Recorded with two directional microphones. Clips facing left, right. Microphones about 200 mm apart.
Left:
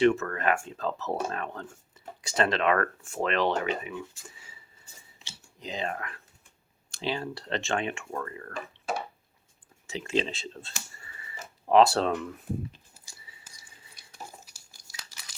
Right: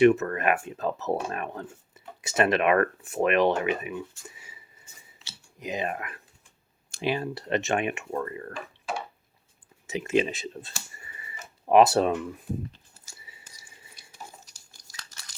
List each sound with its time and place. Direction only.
0.0 s speech: 20° right (ahead or behind)
9.8 s speech: 20° right (ahead or behind)
14.4 s a sound: 10° left (ahead or behind)